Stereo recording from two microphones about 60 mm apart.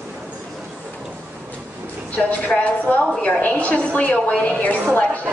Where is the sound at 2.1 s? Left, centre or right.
Left.